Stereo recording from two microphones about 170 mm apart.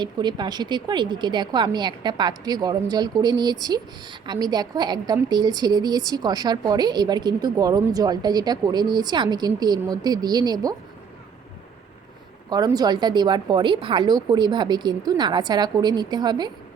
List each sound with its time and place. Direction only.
0.0 s a woman's voice: 25° right (ahead or behind)
12.5 s a woman's voice: 25° right (ahead or behind)